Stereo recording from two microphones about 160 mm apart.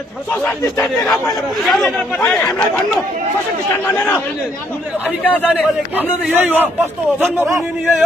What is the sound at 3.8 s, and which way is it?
Speech, 10° left (ahead or behind).